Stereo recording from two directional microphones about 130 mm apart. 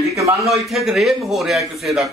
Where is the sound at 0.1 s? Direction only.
25° right (ahead or behind).